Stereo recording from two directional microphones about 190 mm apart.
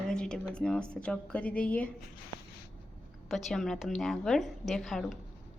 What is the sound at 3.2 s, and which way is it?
A woman's voice, centre (ahead or behind).